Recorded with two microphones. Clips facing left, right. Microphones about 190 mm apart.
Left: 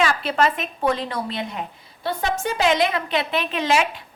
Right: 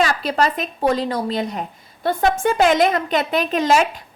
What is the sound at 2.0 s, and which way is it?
A woman's voice, 50° right (ahead or behind).